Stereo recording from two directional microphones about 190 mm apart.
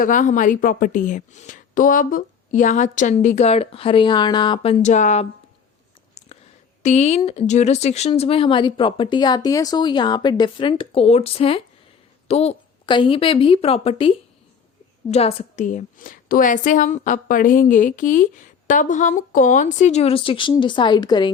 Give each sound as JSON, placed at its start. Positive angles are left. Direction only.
{"t": 0.0, "sound": "a woman's voice", "side_deg": 45}
{"t": 6.2, "sound": "a sound", "side_deg": 35}
{"t": 6.8, "sound": "speech", "side_deg": 35}
{"t": 15.1, "sound": "a woman's voice", "side_deg": 30}